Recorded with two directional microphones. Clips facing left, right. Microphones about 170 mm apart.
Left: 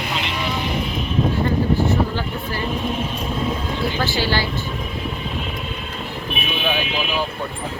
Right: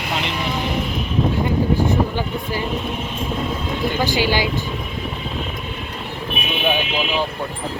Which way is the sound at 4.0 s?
15° right (ahead or behind).